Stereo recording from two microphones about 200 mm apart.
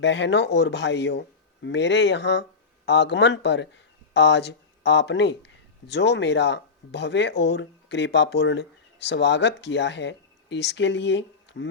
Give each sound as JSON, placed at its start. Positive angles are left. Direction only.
{"t": 0.0, "sound": "speech", "side_deg": 60}